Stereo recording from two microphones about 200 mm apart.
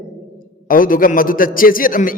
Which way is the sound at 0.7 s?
45° left (ahead or behind).